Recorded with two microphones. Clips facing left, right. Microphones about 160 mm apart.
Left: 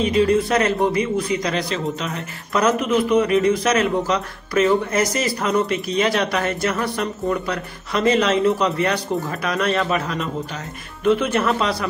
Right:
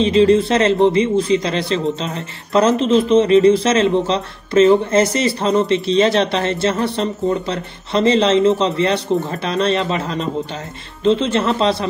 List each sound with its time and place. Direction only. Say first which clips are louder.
0.0 s a man's voice: right 5 dB; 25° right (ahead or behind)